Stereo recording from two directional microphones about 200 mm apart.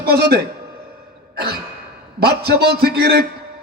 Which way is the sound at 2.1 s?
50° right (ahead or behind).